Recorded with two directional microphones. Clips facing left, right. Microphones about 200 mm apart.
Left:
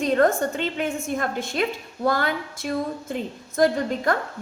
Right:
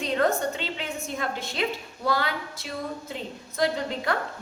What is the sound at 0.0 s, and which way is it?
A woman's voice, 50° left (ahead or behind).